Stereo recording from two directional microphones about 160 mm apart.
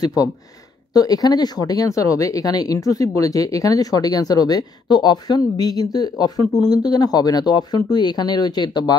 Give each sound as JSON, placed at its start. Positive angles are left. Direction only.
{"t": 0.0, "sound": "speech", "side_deg": 25}